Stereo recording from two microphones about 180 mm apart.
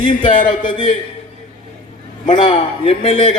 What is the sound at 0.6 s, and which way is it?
Speech, 25° left (ahead or behind).